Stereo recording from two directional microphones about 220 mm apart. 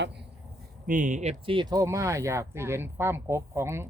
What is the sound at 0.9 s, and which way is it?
Speech, 35° right (ahead or behind).